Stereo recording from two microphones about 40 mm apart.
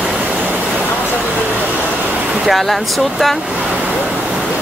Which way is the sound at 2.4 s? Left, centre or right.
Centre.